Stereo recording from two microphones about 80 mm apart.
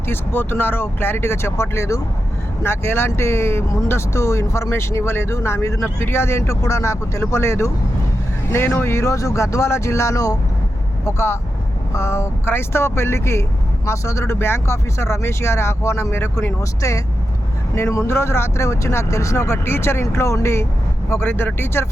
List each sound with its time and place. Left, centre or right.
0.1 s speech: left
16.8 s speech: left